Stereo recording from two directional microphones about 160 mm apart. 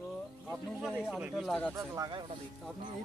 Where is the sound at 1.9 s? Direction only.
25° right (ahead or behind).